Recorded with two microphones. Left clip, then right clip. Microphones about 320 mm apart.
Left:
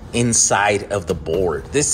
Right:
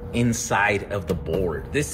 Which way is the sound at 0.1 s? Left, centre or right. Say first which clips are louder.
Left 6 dB; centre.